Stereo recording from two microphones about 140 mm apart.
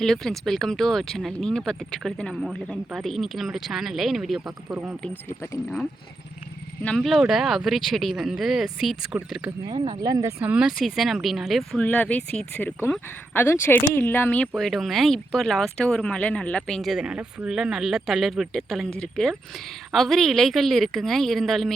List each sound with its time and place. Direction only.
0.0 s speech: 5° left (ahead or behind)
6.8 s speech: 5° left (ahead or behind)
9.6 s speech: 35° right (ahead or behind)
10.4 s speech: 5° right (ahead or behind)
11.8 s speech: 10° left (ahead or behind)
14.5 s speech: centre (ahead or behind)